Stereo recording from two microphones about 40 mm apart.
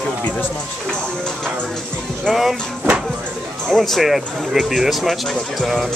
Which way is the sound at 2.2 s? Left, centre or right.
Centre.